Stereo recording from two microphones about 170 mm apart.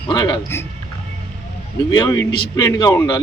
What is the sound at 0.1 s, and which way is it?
Speech, 25° left (ahead or behind).